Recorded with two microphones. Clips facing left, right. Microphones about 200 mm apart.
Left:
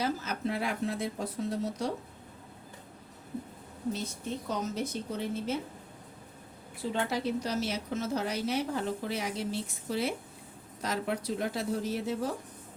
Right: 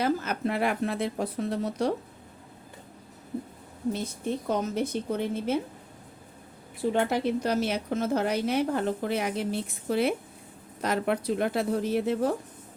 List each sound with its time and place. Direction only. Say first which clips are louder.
0.0 s a woman's voice: right 5 dB; 60° right (ahead or behind)
4.4 s a woman's voice: right 5 dB; 55° right (ahead or behind)
6.9 s a woman's voice: right 4 dB; 55° right (ahead or behind)